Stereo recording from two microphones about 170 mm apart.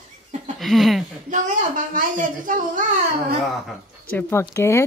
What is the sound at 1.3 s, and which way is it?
Speech, 50° right (ahead or behind).